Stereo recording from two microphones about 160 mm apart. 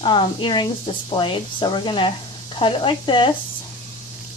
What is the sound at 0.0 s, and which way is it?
Speech, 30° left (ahead or behind).